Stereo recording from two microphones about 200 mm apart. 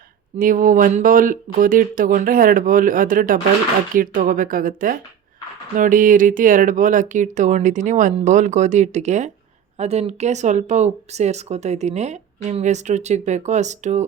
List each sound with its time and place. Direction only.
0.3 s speech: 45° right (ahead or behind)